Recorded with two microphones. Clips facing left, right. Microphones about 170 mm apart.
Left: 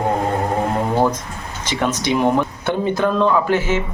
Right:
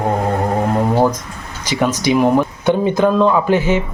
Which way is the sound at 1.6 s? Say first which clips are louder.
Right 4 dB; 10° right (ahead or behind).